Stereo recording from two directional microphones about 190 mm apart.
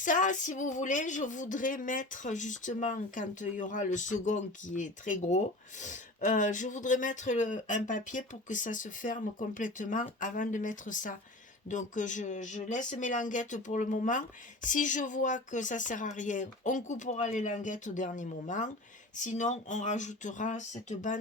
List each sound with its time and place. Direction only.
0.0 s speech: 45° left (ahead or behind)